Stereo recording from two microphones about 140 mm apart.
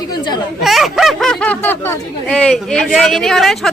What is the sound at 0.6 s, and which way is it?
Speech, centre (ahead or behind).